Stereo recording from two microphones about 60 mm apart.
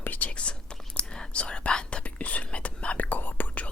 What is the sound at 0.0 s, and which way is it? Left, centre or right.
Whispering, left.